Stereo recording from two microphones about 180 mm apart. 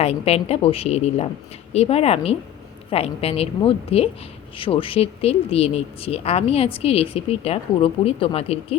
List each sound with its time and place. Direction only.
0.0 s speech: 35° left (ahead or behind)